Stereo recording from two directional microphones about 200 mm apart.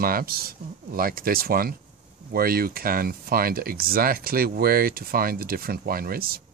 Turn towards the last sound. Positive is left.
turn(degrees=-45)  # may be behind; listen again after turning